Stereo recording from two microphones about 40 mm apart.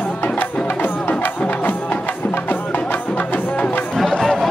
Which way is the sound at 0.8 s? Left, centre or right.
Left.